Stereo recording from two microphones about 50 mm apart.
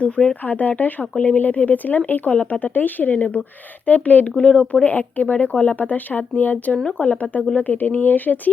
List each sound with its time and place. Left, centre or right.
0.0 s speech: centre
0.4 s speech: left
2.3 s speech: left
2.6 s speech: left